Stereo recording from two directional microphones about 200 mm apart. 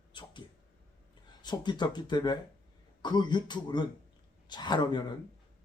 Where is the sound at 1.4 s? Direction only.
20° left (ahead or behind).